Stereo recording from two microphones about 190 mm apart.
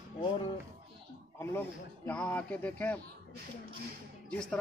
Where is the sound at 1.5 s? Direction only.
10° left (ahead or behind).